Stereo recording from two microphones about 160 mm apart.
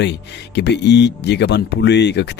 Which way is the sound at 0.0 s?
90° left.